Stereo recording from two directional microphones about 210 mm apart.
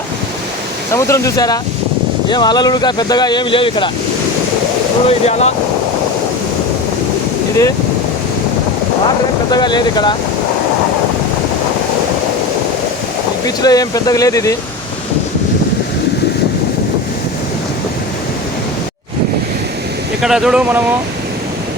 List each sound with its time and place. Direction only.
0.9 s speech: 15° left (ahead or behind)
5.0 s speech: 30° left (ahead or behind)
9.5 s speech: 20° left (ahead or behind)
13.4 s speech: 20° left (ahead or behind)
20.2 s speech: centre (ahead or behind)